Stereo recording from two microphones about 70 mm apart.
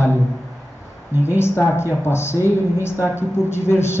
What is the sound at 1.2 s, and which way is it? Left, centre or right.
Speech, left.